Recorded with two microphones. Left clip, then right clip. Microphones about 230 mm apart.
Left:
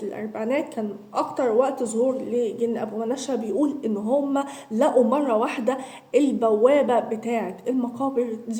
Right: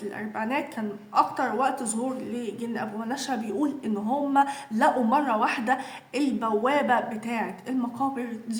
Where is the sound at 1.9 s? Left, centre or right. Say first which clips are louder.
Left 9 dB; centre.